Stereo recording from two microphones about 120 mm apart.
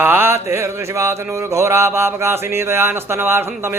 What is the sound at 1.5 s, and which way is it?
Speech, 20° right (ahead or behind).